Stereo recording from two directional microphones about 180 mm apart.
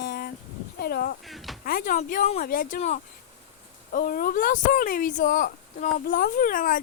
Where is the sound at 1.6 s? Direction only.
50° left (ahead or behind).